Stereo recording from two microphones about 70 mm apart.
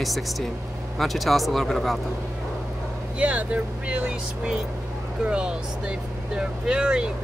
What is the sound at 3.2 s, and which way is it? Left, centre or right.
Speech, centre.